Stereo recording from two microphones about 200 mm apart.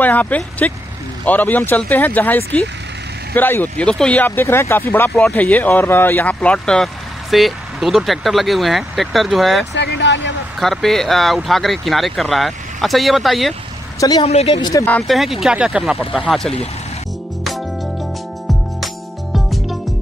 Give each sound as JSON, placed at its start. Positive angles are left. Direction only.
{"t": 0.0, "sound": "speech", "side_deg": 10}
{"t": 9.8, "sound": "speech", "side_deg": 60}
{"t": 10.6, "sound": "speech", "side_deg": 0}
{"t": 13.9, "sound": "a woman's voice", "side_deg": 20}
{"t": 14.2, "sound": "speech", "side_deg": 30}
{"t": 15.0, "sound": "speech", "side_deg": 0}
{"t": 19.3, "sound": "music", "side_deg": 0}